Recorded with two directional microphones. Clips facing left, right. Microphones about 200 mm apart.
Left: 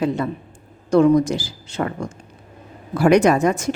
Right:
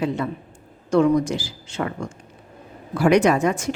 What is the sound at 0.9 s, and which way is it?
Speech, 40° left (ahead or behind).